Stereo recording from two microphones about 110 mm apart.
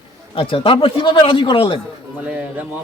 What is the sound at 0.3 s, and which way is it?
A man's voice, 55° left (ahead or behind).